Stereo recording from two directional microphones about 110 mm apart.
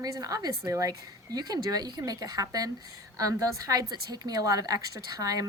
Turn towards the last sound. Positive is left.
turn(degrees=-35)  # may be behind; listen again after turning